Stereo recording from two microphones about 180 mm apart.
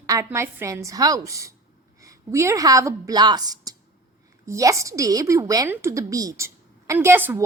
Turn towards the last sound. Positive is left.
turn(degrees=-10)  # may be behind; listen again after turning